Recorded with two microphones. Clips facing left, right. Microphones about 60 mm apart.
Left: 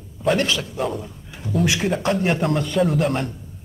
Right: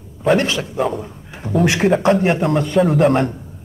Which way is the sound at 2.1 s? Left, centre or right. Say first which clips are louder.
Right 5 dB; right.